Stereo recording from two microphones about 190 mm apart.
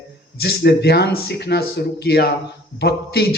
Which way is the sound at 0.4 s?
60° left (ahead or behind).